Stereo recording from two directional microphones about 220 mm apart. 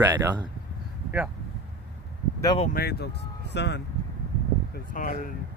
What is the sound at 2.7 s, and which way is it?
Speech, 45° left (ahead or behind).